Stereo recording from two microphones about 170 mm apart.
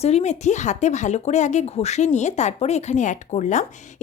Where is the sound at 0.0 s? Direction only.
40° left (ahead or behind).